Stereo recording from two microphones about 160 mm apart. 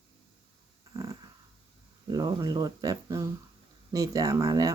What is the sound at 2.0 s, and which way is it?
Speech, 25° right (ahead or behind).